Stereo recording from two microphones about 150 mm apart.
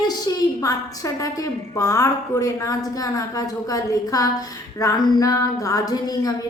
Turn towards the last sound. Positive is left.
turn(degrees=25)  # may be behind; listen again after turning